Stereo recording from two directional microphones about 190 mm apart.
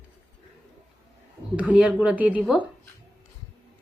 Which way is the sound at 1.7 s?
5° right (ahead or behind).